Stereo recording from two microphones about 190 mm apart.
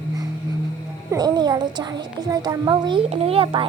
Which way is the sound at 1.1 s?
20° right (ahead or behind).